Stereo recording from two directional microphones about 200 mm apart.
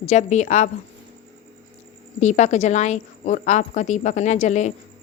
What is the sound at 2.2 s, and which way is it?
Speech, 35° left (ahead or behind).